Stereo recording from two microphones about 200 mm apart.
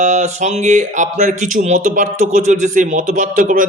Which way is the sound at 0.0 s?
35° right (ahead or behind).